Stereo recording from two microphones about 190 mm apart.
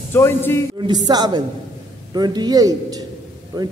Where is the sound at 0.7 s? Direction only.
20° right (ahead or behind).